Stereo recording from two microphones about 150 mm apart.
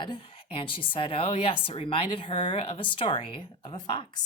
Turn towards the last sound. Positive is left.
turn(degrees=30)  # may be behind; listen again after turning